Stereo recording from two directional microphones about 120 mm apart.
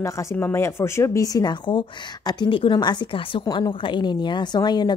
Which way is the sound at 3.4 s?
30° left (ahead or behind).